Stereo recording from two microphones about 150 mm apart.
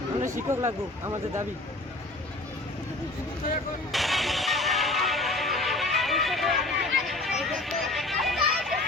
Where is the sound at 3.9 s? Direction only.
Centre (ahead or behind).